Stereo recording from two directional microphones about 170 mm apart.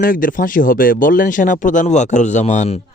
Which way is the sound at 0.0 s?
55° left (ahead or behind).